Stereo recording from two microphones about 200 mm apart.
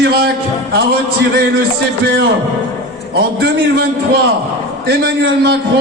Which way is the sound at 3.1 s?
50° right (ahead or behind).